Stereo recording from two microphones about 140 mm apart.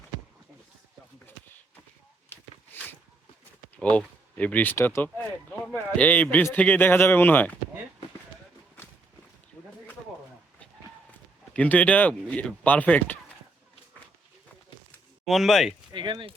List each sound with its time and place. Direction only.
2.3 s a sound: 10° left (ahead or behind)
3.8 s speech: 10° left (ahead or behind)
11.5 s speech: 10° left (ahead or behind)
15.2 s speech: centre (ahead or behind)
15.9 s speech: 35° right (ahead or behind)